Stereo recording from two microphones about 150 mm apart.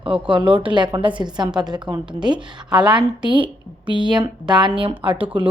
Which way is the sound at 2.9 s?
30° right (ahead or behind).